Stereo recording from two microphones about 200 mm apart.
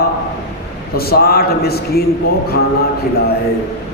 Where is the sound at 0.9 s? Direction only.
50° left (ahead or behind).